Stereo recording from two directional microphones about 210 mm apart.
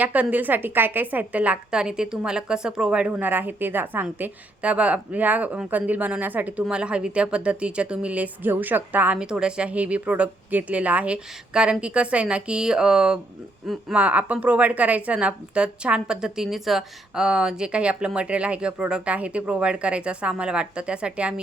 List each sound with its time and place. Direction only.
0.0 s a woman's voice: 5° right (ahead or behind)